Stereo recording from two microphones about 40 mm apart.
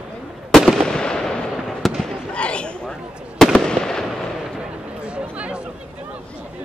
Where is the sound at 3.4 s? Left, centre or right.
Centre.